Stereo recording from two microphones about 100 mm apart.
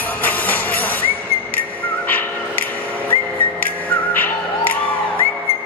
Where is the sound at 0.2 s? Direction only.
20° left (ahead or behind).